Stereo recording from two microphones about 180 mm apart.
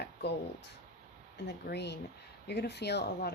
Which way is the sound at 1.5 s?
65° left (ahead or behind).